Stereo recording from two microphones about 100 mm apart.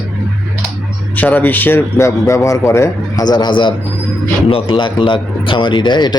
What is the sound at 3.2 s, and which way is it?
A man's voice, 45° left (ahead or behind).